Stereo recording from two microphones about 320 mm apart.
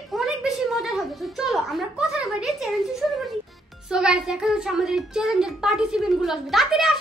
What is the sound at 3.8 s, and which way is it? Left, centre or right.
A child's voice, centre.